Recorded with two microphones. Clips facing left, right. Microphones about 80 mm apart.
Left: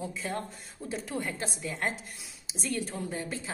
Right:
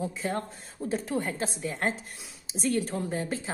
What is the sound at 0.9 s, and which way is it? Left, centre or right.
A woman's voice, right.